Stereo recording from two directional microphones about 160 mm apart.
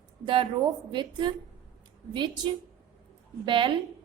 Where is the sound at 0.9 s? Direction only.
30° right (ahead or behind).